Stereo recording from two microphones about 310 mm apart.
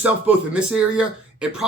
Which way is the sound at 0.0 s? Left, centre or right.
Centre.